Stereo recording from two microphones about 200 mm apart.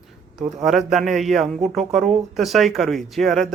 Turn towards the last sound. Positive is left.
turn(degrees=0)  # may be behind; listen again after turning